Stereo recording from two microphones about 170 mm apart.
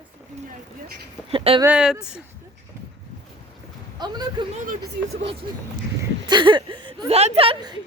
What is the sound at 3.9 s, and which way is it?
Speech, 25° right (ahead or behind).